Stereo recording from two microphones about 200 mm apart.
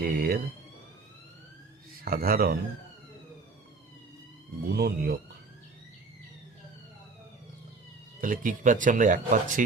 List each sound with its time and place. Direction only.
0.0 s speech: 50° right (ahead or behind)
2.0 s speech: 50° right (ahead or behind)
4.7 s speech: 50° right (ahead or behind)
8.2 s speech: 45° right (ahead or behind)